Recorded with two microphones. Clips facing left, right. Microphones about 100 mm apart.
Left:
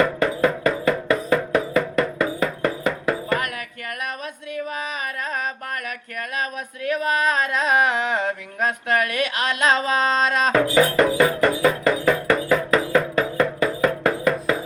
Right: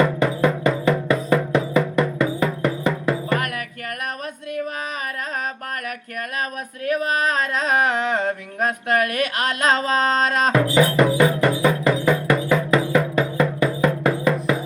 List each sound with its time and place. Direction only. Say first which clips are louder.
0.0 s music: right 1 dB; 20° right (ahead or behind)
6.8 s a sound: even; 45° right (ahead or behind)
10.7 s music: right 1 dB; 20° right (ahead or behind)